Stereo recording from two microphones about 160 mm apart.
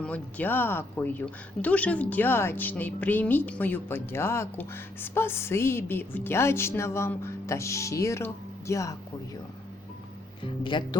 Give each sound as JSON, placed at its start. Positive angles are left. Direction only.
{"t": 0.0, "sound": "speech", "side_deg": 10}
{"t": 10.4, "sound": "speech", "side_deg": 30}